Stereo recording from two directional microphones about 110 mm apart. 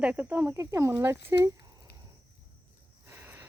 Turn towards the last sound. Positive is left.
turn(degrees=-20)  # may be behind; listen again after turning